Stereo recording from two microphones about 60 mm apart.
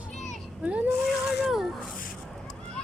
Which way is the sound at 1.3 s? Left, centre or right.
Centre.